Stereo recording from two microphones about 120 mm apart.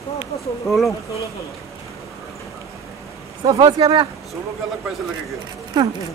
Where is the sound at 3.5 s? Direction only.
35° right (ahead or behind).